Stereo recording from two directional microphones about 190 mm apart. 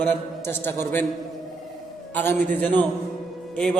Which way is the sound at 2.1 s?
10° left (ahead or behind).